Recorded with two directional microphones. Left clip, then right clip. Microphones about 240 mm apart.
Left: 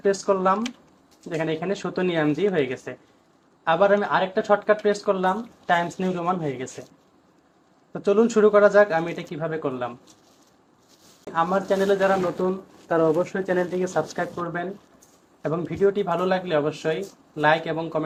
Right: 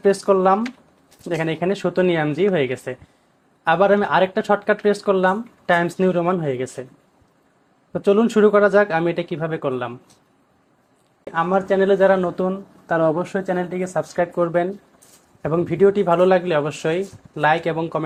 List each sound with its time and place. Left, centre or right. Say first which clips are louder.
0.0 s speech: right 5 dB; right
7.9 s speech: right 3 dB; right
11.3 s speech: right 3 dB; right